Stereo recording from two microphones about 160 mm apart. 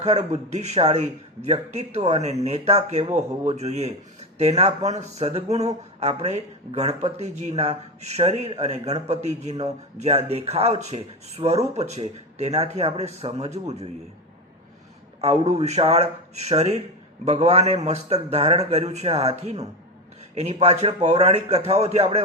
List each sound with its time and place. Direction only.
0.0 s speech: 45° right (ahead or behind)
15.2 s speech: 40° right (ahead or behind)